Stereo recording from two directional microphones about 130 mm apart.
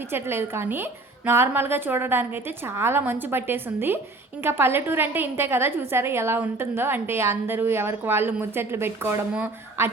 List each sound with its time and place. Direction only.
0.1 s a woman's voice: 20° right (ahead or behind)